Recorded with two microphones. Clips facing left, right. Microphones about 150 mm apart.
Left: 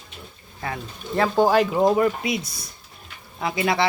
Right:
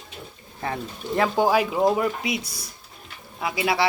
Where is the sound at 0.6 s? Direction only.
20° right (ahead or behind).